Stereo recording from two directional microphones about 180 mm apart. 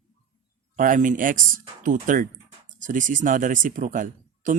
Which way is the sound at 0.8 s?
45° right (ahead or behind).